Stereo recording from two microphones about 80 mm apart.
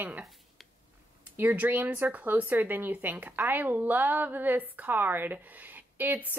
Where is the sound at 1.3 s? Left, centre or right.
Right.